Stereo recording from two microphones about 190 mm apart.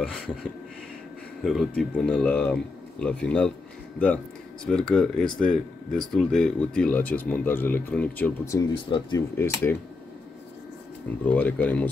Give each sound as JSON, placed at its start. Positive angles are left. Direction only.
{"t": 1.4, "sound": "speech", "side_deg": 0}
{"t": 4.6, "sound": "speech", "side_deg": 5}
{"t": 8.5, "sound": "speech", "side_deg": 20}
{"t": 9.4, "sound": "speech", "side_deg": 10}
{"t": 11.2, "sound": "speech", "side_deg": 10}